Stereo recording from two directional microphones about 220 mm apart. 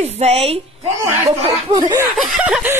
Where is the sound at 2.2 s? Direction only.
Centre (ahead or behind).